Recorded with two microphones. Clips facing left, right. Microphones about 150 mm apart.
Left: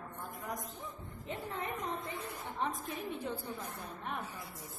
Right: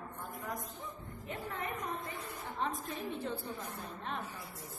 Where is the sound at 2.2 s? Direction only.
20° left (ahead or behind).